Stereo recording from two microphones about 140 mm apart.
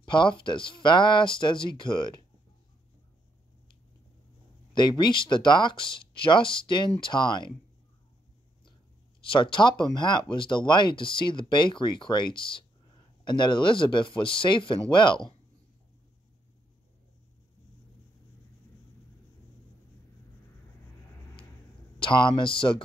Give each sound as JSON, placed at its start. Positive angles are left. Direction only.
{"t": 0.0, "sound": "speech", "side_deg": 35}
{"t": 4.7, "sound": "speech", "side_deg": 30}
{"t": 9.2, "sound": "speech", "side_deg": 35}
{"t": 22.0, "sound": "speech", "side_deg": 35}